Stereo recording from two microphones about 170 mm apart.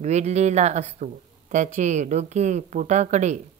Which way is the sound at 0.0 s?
40° right (ahead or behind).